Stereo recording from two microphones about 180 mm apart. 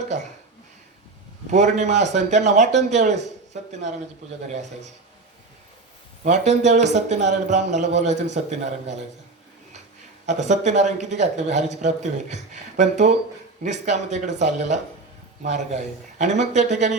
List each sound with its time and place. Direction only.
1.5 s a man's voice: 40° right (ahead or behind)
6.2 s a man's voice: 40° right (ahead or behind)
10.2 s a man's voice: 40° right (ahead or behind)